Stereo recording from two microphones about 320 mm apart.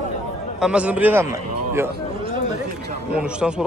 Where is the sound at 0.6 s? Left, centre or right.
Centre.